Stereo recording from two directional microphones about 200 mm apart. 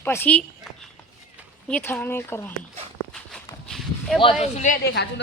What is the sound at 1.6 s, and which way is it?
Speech, 10° left (ahead or behind).